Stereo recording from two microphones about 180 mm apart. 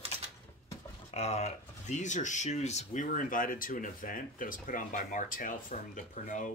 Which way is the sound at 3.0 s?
50° left (ahead or behind).